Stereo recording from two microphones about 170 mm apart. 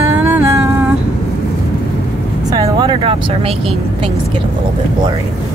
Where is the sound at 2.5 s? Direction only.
25° right (ahead or behind).